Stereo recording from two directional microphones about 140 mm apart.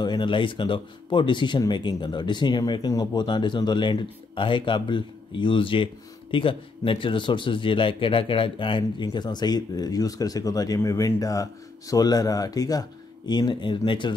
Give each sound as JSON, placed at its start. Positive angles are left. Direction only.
{"t": 0.0, "sound": "speech", "side_deg": 35}